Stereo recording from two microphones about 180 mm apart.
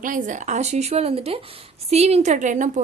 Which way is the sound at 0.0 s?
45° right (ahead or behind).